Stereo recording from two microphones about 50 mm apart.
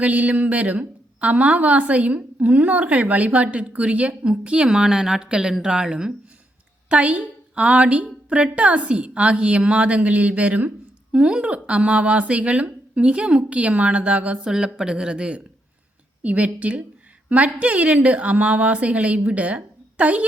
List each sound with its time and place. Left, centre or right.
0.0 s a woman's voice: right
14.4 s a woman's voice: centre